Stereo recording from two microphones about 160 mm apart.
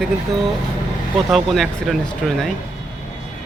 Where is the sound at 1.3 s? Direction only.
Centre (ahead or behind).